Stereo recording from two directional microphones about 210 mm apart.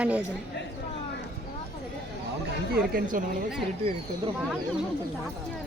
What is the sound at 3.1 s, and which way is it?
Speech, 40° right (ahead or behind).